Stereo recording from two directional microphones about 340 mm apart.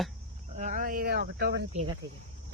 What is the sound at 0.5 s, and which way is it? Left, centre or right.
Cricket, right.